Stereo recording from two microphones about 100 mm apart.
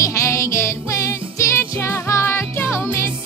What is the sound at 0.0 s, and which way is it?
Music, 30° left (ahead or behind).